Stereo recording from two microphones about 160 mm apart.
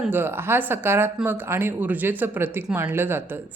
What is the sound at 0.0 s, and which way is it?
A woman's voice, 15° right (ahead or behind).